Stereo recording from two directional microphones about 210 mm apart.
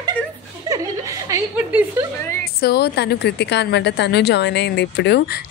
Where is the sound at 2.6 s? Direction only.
50° left (ahead or behind).